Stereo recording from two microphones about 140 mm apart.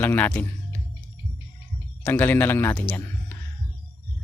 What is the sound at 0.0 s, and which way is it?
Speech, 15° left (ahead or behind).